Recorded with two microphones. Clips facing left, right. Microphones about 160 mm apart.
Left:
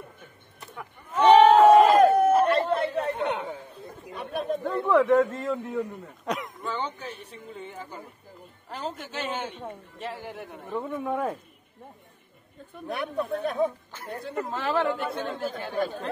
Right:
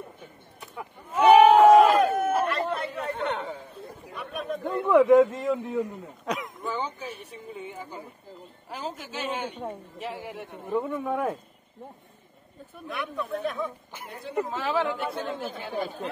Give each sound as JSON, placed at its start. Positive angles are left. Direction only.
{"t": 0.7, "sound": "a sound", "side_deg": -10}
{"t": 2.1, "sound": "chatter", "side_deg": 35}
{"t": 3.2, "sound": "chatter", "side_deg": 10}
{"t": 4.1, "sound": "chatter", "side_deg": 30}
{"t": 4.8, "sound": "speech", "side_deg": -15}
{"t": 6.2, "sound": "speech", "side_deg": 0}
{"t": 12.8, "sound": "speech", "side_deg": 40}
{"t": 14.3, "sound": "speech", "side_deg": -5}